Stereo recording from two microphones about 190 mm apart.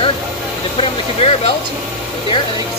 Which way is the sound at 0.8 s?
30° left (ahead or behind).